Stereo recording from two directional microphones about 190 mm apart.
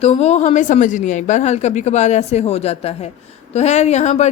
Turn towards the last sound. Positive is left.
turn(degrees=35)  # may be behind; listen again after turning